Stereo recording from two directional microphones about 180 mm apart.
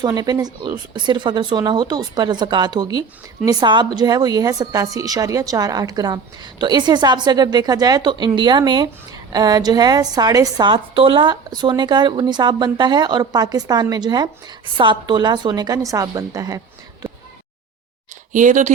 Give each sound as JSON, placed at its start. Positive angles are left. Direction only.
{"t": 0.0, "sound": "a woman's voice", "side_deg": -20}
{"t": 18.3, "sound": "speech", "side_deg": -45}